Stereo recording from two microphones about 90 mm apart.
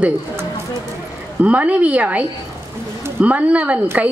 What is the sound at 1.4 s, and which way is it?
Speech, 15° right (ahead or behind).